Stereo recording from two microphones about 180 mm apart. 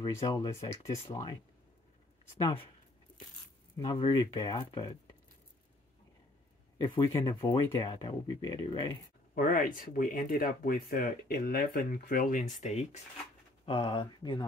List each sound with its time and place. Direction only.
0.0 s speech: 20° left (ahead or behind)
2.4 s speech: 30° left (ahead or behind)
3.7 s speech: 25° left (ahead or behind)
6.8 s speech: 25° left (ahead or behind)
9.3 s speech: 50° left (ahead or behind)
13.7 s speech: 25° left (ahead or behind)